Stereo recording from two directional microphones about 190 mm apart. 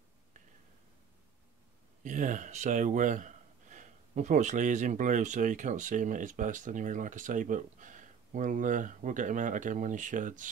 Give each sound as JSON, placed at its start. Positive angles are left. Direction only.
{"t": 2.0, "sound": "speech", "side_deg": -40}